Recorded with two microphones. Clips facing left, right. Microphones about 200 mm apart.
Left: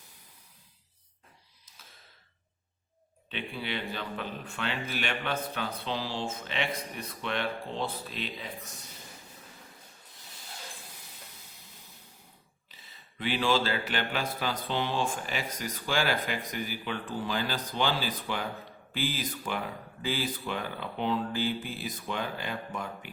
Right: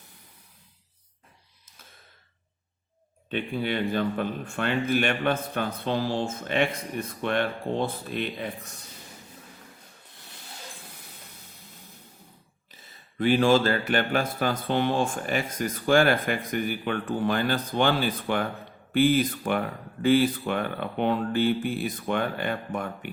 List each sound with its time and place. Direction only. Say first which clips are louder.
3.2 s speech: right 8 dB; 50° right (ahead or behind)
12.7 s speech: right 10 dB; 45° right (ahead or behind)